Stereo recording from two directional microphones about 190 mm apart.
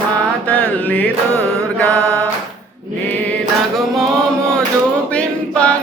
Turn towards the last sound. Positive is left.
turn(degrees=5)  # may be behind; listen again after turning